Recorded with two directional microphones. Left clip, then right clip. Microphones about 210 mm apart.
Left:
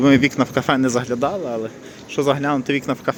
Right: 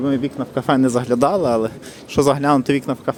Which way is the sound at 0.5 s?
5° right (ahead or behind).